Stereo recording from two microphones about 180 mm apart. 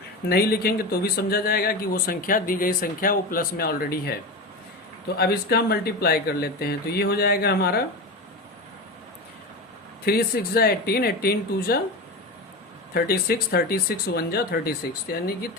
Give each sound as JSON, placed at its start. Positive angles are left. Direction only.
{"t": 0.3, "sound": "speech", "side_deg": 60}
{"t": 10.1, "sound": "speech", "side_deg": 60}
{"t": 12.9, "sound": "speech", "side_deg": 60}